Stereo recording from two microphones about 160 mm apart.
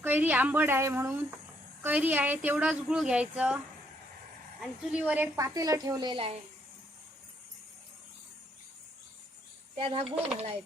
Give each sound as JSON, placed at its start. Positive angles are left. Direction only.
{"t": 0.0, "sound": "a woman's voice", "side_deg": -10}
{"t": 4.6, "sound": "a woman's voice", "side_deg": -5}
{"t": 5.4, "sound": "a woman's voice", "side_deg": -20}
{"t": 9.7, "sound": "a child's voice", "side_deg": -35}